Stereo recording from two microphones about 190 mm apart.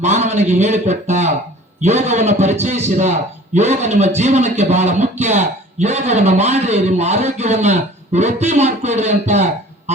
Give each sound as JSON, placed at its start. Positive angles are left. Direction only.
{"t": 0.0, "sound": "a man's voice", "side_deg": -35}